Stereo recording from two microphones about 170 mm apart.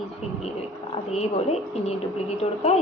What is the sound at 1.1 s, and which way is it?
Speech, 40° left (ahead or behind).